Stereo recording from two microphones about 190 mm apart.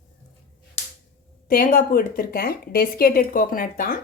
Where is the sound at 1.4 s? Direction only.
45° left (ahead or behind).